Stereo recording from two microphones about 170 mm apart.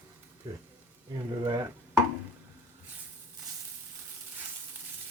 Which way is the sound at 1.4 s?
20° right (ahead or behind).